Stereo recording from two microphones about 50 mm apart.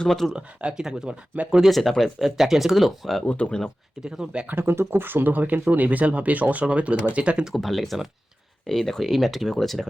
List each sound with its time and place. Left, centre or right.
0.0 s speech: centre
0.3 s speech: centre
1.7 s speech: centre
2.4 s speech: centre
3.2 s speech: left
4.0 s speech: centre
4.4 s speech: right
4.7 s speech: right
7.6 s speech: centre